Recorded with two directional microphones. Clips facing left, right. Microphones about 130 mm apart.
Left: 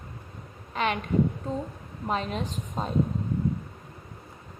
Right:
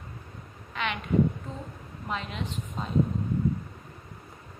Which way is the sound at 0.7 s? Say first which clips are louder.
Left 5 dB; 40° left (ahead or behind).